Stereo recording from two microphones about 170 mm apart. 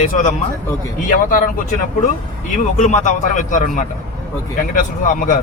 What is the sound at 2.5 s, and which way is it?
A man's voice, 45° left (ahead or behind).